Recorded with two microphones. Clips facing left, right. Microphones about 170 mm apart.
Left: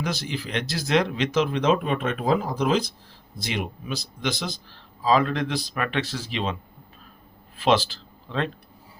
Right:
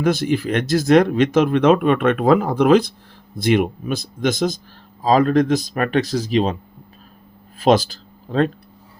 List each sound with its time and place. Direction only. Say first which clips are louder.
0.0 s speech: right 11 dB; 50° right (ahead or behind)
7.6 s speech: right 6 dB; 40° right (ahead or behind)